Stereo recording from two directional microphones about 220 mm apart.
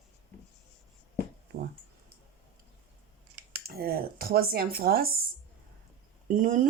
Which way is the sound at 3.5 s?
45° right (ahead or behind).